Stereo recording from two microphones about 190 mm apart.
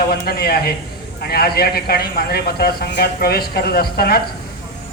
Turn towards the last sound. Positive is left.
turn(degrees=55)  # may be behind; listen again after turning